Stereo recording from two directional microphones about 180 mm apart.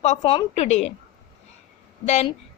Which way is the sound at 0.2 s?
30° left (ahead or behind).